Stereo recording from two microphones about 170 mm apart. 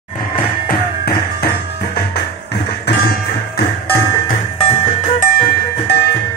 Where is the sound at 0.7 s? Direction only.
60° left (ahead or behind).